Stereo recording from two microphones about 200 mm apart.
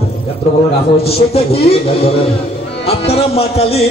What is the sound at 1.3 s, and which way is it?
Speech, 30° left (ahead or behind).